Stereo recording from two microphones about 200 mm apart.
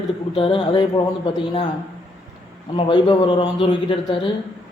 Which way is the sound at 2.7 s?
25° left (ahead or behind).